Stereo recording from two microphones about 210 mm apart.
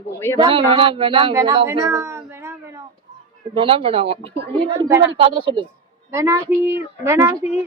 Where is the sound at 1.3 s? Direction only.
15° right (ahead or behind).